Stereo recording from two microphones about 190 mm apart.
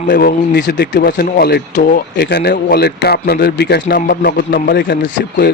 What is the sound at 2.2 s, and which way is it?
Speech, 60° left (ahead or behind).